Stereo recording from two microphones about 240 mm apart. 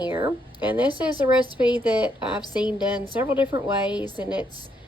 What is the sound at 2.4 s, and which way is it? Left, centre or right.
Speech, centre.